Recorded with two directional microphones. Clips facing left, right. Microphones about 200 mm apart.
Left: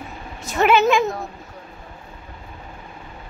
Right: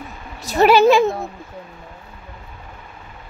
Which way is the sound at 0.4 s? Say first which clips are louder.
Right 4 dB; 35° right (ahead or behind).